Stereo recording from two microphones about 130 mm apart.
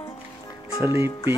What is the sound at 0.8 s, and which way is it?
Speech, 20° right (ahead or behind).